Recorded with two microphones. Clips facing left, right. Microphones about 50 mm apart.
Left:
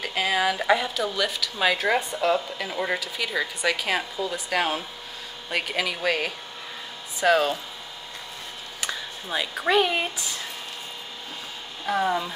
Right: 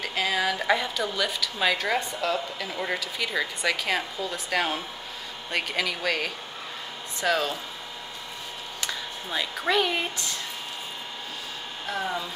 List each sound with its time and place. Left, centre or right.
0.0 s speech: centre
8.8 s speech: centre
11.8 s speech: centre